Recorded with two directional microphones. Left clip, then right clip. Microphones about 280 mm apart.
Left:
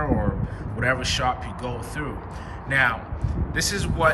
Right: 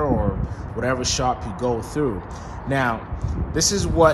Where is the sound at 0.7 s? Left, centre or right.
Centre.